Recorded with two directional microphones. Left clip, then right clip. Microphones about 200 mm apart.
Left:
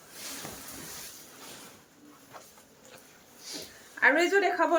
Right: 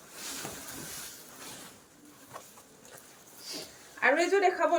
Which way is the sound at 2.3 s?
20° right (ahead or behind).